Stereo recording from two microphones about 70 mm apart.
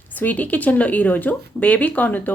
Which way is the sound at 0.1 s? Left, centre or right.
Left.